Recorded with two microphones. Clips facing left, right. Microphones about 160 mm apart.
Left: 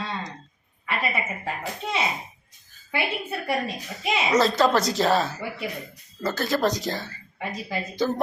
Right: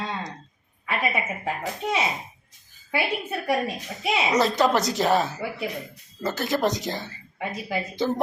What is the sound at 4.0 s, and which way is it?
A woman's voice, 15° right (ahead or behind).